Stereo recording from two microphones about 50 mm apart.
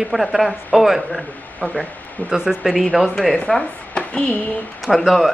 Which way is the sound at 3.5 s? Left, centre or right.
Centre.